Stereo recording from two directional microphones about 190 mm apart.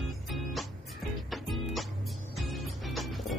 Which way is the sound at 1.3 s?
Centre (ahead or behind).